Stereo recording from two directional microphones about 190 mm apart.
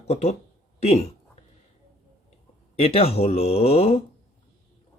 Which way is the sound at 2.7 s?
30° left (ahead or behind).